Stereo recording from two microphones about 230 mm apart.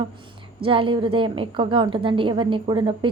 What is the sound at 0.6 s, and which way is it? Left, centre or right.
A woman's voice, right.